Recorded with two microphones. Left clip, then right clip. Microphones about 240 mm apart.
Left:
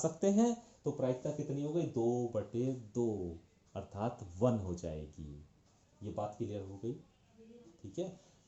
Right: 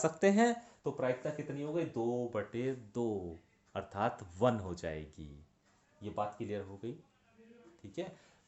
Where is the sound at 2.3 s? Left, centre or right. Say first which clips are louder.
Even; right.